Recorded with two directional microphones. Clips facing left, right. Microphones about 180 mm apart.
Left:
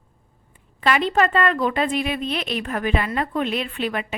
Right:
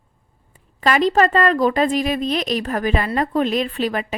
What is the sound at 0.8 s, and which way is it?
A woman's voice, 40° right (ahead or behind).